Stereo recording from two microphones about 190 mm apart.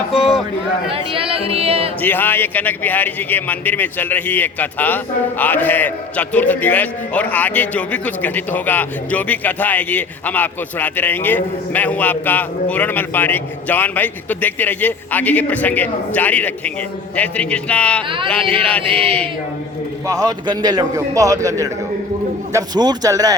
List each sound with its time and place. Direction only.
0.1 s a sound: centre (ahead or behind)
0.9 s speech: 30° right (ahead or behind)
1.5 s music: 30° right (ahead or behind)
2.0 s a man's voice: 10° left (ahead or behind)
20.1 s a man's voice: 20° right (ahead or behind)
22.5 s a man's voice: 20° right (ahead or behind)